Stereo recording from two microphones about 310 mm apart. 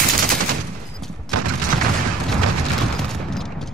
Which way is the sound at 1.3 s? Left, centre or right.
Right.